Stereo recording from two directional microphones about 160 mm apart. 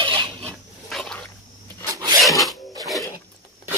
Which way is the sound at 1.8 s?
20° right (ahead or behind).